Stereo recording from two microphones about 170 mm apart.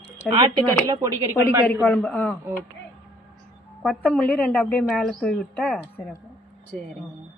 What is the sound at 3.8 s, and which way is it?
Speech, 10° left (ahead or behind).